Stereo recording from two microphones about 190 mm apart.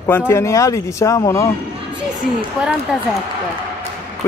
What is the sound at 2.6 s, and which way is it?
Speech, 5° right (ahead or behind).